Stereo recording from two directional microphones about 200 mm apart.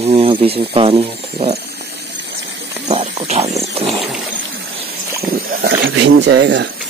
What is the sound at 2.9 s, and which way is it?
Speech, 30° right (ahead or behind).